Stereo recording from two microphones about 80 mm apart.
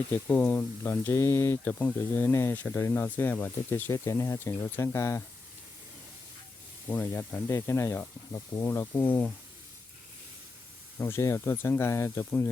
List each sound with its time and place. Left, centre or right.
0.1 s speech: left
0.9 s speech: left
1.6 s speech: left
2.3 s speech: left
3.9 s speech: left
6.9 s speech: left
10.9 s speech: left